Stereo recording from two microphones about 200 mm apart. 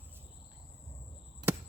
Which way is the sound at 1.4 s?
20° right (ahead or behind).